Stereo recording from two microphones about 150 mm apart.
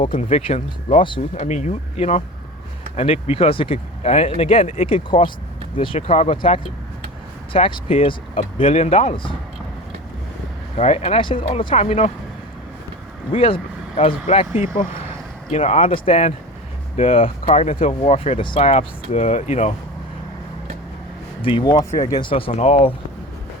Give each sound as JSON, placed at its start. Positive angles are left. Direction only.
{"t": 0.1, "sound": "speech", "side_deg": 50}
{"t": 10.8, "sound": "speech", "side_deg": 45}
{"t": 13.3, "sound": "speech", "side_deg": 40}
{"t": 21.4, "sound": "speech", "side_deg": 30}